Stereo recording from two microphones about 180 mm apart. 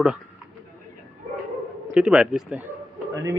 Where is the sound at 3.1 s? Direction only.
15° right (ahead or behind).